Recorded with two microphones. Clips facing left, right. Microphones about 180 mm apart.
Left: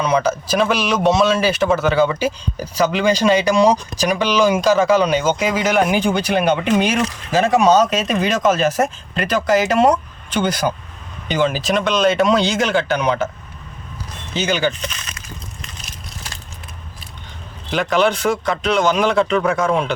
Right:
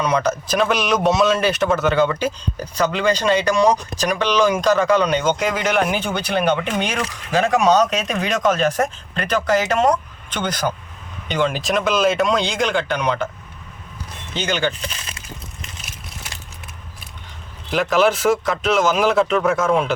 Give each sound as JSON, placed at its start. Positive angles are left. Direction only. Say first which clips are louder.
{"t": 0.0, "sound": "speech", "louder": "left 2 dB", "side_deg": 5}
{"t": 14.3, "sound": "speech", "louder": "left 3 dB", "side_deg": 10}
{"t": 14.8, "sound": "a sound", "louder": "left 1 dB", "side_deg": -30}
{"t": 17.7, "sound": "speech", "louder": "even", "side_deg": 0}